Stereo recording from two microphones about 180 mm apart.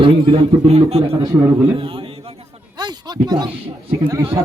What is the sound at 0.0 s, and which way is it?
A man's voice, 30° right (ahead or behind).